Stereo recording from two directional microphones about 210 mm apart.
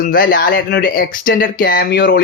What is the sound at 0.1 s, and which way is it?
Speech, 45° left (ahead or behind).